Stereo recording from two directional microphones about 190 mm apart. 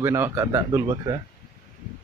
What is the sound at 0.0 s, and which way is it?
Speech, 15° right (ahead or behind).